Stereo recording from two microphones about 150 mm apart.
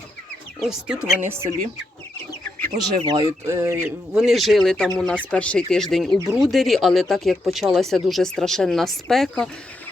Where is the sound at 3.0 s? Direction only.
30° right (ahead or behind).